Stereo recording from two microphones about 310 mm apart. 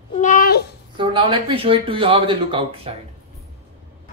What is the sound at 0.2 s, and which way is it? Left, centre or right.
Babbling, left.